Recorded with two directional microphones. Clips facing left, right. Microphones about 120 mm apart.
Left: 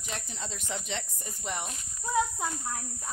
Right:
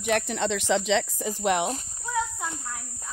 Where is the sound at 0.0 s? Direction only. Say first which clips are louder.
Right 15 dB; 70° right (ahead or behind).